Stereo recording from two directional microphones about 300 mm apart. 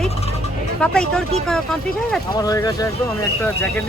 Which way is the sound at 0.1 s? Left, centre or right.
Left.